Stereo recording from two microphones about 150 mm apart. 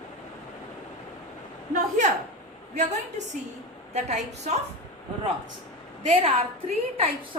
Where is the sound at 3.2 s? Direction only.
50° right (ahead or behind).